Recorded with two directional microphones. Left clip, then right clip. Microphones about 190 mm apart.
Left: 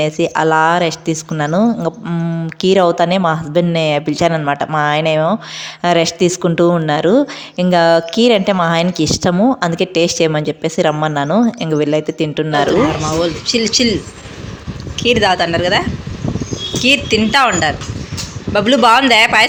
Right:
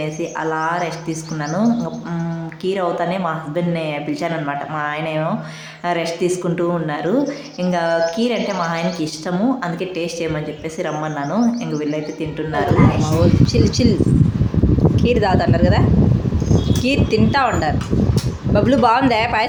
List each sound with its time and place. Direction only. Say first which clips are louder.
0.0 s a woman's voice: left 9 dB; 50° left (ahead or behind)
13.1 s speech: left 2 dB; centre (ahead or behind)
15.0 s speech: left 7 dB; centre (ahead or behind)
16.8 s speech: left 7 dB; centre (ahead or behind)